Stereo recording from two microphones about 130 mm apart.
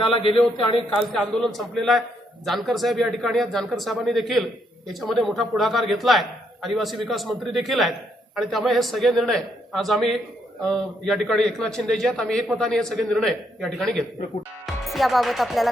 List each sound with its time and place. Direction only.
0.1 s a man's voice: 45° left (ahead or behind)
0.9 s a man's voice: centre (ahead or behind)